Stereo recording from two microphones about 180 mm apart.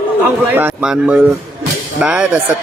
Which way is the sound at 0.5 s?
5° right (ahead or behind).